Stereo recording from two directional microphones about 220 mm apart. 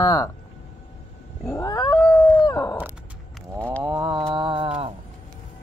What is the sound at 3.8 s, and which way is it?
Wild animals, 20° right (ahead or behind).